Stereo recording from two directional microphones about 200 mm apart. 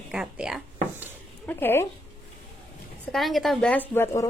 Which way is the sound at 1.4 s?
10° left (ahead or behind).